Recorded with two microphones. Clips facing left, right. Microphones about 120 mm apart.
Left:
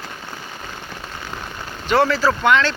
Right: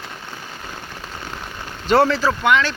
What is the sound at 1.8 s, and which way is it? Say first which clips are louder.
Speech: right 2 dB; 30° right (ahead or behind).